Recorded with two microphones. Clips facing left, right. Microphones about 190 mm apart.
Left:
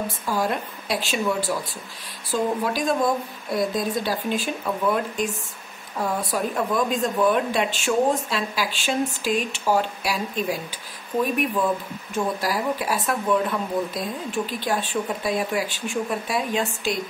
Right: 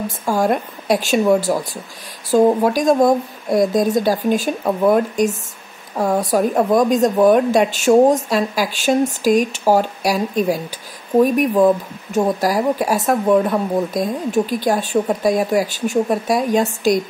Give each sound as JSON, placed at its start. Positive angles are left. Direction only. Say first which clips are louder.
{"t": 0.2, "sound": "a woman's voice", "louder": "right 9 dB", "side_deg": -45}